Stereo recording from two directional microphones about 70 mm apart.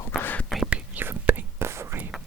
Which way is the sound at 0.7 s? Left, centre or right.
Right.